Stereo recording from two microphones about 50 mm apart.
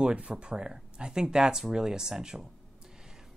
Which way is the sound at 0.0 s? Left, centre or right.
Right.